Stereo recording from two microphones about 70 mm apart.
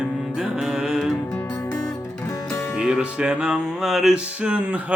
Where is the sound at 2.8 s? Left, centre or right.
Centre.